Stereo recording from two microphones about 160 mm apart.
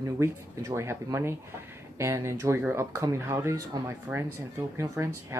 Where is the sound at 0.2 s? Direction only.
20° right (ahead or behind).